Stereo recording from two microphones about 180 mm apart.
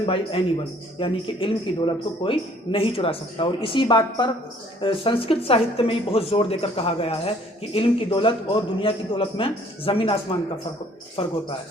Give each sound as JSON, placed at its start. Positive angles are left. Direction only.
{"t": 0.0, "sound": "a woman's voice", "side_deg": 30}